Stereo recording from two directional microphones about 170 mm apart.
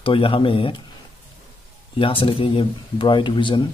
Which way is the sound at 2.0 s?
30° left (ahead or behind).